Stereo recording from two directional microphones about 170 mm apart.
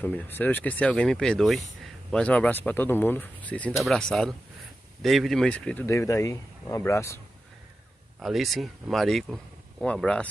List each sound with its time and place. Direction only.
0.0 s speech: 10° left (ahead or behind)
5.9 s speech: 15° left (ahead or behind)
8.2 s speech: centre (ahead or behind)